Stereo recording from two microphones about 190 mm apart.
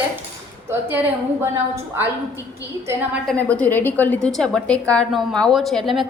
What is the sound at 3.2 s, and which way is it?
A woman's voice, 5° left (ahead or behind).